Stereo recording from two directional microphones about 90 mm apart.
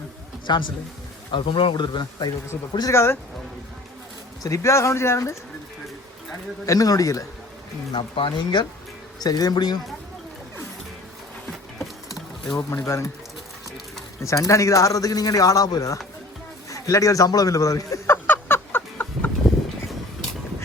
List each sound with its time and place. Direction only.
0.4 s speech: 60° left (ahead or behind)
1.3 s speech: 75° left (ahead or behind); by 2.3 s 55° left (ahead or behind)
2.9 s speech: 30° left (ahead or behind)
4.4 s speech: 35° left (ahead or behind)
6.7 s speech: 45° left (ahead or behind)
7.9 s speech: 65° left (ahead or behind)
9.1 s speech: 45° left (ahead or behind)
12.5 s speech: 35° left (ahead or behind)
14.3 s speech: 35° left (ahead or behind)
16.6 s a sound: 40° left (ahead or behind); by 19.3 s 25° left (ahead or behind)